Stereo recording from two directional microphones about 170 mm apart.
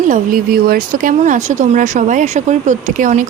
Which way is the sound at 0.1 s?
55° right (ahead or behind).